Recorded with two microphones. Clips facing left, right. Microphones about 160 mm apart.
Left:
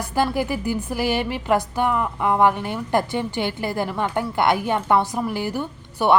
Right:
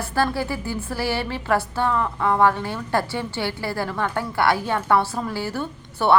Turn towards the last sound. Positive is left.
turn(degrees=15)  # may be behind; listen again after turning